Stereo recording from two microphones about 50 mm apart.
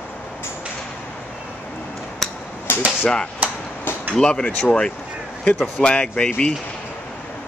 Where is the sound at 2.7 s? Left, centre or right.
Left.